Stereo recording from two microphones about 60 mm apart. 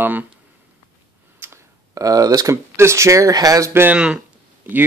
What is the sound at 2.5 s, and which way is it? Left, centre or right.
Speech, right.